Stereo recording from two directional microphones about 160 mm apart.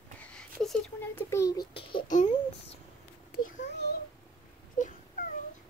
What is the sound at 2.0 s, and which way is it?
Babbling, 50° left (ahead or behind).